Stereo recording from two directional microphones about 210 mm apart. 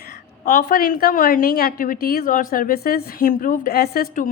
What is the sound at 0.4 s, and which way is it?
A woman's voice, 45° left (ahead or behind).